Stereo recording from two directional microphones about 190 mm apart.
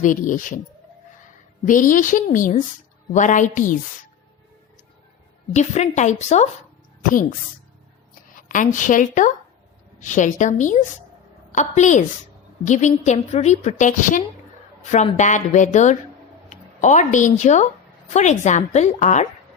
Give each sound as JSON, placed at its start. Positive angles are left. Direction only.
{"t": 0.0, "sound": "a woman's voice", "side_deg": 45}
{"t": 1.6, "sound": "a woman's voice", "side_deg": 45}
{"t": 5.5, "sound": "a woman's voice", "side_deg": 35}
{"t": 8.4, "sound": "a woman's voice", "side_deg": 45}